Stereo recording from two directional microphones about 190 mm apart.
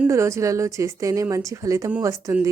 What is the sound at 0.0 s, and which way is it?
A woman's voice, 15° right (ahead or behind).